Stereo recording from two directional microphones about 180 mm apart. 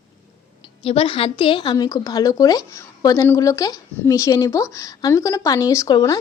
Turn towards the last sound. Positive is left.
turn(degrees=20)  # may be behind; listen again after turning